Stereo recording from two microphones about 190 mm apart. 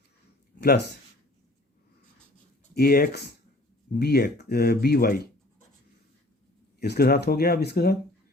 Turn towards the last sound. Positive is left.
turn(degrees=55)  # may be behind; listen again after turning